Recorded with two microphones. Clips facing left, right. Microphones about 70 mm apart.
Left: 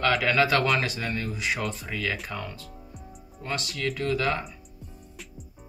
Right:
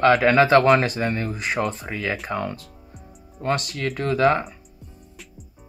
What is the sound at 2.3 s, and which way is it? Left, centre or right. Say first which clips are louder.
Speech: right 8 dB; right.